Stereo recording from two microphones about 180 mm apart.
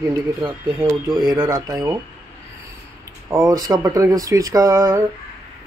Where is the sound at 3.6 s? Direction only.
20° right (ahead or behind).